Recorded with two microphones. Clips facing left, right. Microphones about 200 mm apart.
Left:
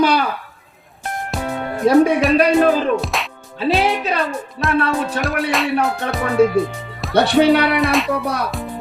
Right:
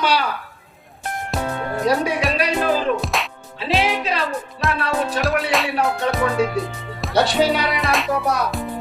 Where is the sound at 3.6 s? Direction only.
45° left (ahead or behind).